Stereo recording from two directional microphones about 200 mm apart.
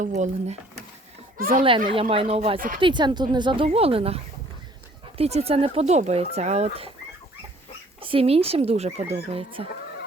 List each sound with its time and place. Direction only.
0.0 s speech: 35° right (ahead or behind)
1.4 s speech: 45° right (ahead or behind)
1.9 s speech: 25° right (ahead or behind)
8.0 s speech: 30° right (ahead or behind)